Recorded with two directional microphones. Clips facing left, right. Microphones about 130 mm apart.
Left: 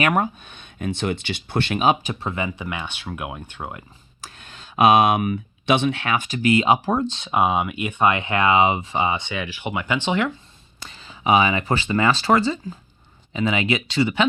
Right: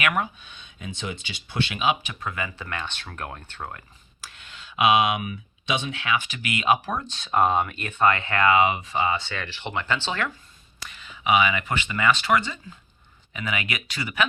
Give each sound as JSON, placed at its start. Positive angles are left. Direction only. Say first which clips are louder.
{"t": 0.0, "sound": "speech", "louder": "left 5 dB", "side_deg": 40}
{"t": 2.2, "sound": "speech", "louder": "left 4 dB", "side_deg": 25}
{"t": 4.2, "sound": "speech", "louder": "left 3 dB", "side_deg": 40}
{"t": 7.3, "sound": "speech", "louder": "even", "side_deg": 10}
{"t": 10.8, "sound": "speech", "louder": "left 3 dB", "side_deg": 30}